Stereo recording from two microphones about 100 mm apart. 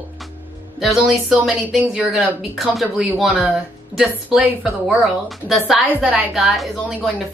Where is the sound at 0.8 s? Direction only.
Centre (ahead or behind).